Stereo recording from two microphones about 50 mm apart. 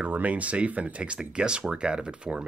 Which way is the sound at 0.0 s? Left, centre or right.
Right.